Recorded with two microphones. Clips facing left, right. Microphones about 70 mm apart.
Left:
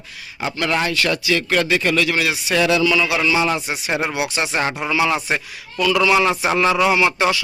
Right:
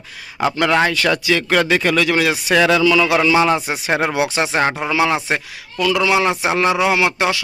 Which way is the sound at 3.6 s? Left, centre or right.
Right.